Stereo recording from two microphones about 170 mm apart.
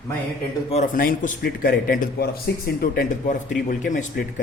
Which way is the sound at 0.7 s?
50° left (ahead or behind).